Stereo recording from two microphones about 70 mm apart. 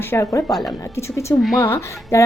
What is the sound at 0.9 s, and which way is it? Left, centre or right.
A woman's voice, left.